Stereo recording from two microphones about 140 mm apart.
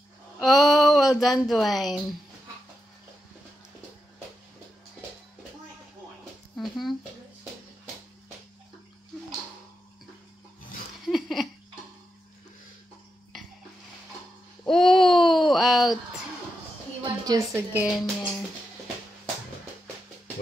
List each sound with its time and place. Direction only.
0.4 s speech: centre (ahead or behind)
6.5 s speech: centre (ahead or behind)
11.1 s laughter: centre (ahead or behind)
14.6 s a sound: 5° left (ahead or behind)
17.0 s a sound: 25° right (ahead or behind)
17.8 s music: 5° left (ahead or behind)